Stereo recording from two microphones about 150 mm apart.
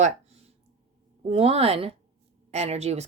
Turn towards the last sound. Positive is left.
turn(degrees=-45)  # may be behind; listen again after turning